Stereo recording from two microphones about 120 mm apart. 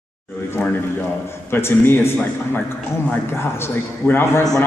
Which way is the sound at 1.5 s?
20° left (ahead or behind).